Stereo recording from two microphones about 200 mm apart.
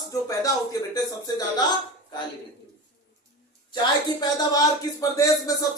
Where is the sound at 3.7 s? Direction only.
20° left (ahead or behind).